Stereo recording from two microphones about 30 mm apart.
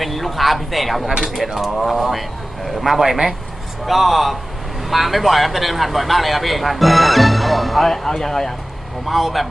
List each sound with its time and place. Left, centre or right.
0.0 s speech: centre
9.0 s speech: centre